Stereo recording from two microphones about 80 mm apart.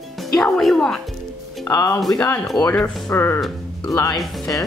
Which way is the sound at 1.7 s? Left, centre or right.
Left.